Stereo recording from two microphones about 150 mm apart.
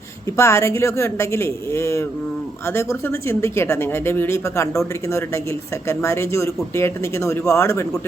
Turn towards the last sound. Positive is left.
turn(degrees=20)  # may be behind; listen again after turning